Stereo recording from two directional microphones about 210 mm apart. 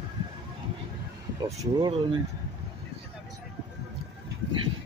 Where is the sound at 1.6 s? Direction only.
20° right (ahead or behind).